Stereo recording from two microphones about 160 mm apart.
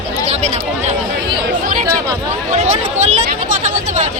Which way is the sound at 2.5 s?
45° right (ahead or behind).